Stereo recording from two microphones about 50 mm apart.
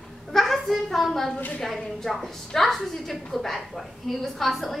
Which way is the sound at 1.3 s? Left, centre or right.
Left.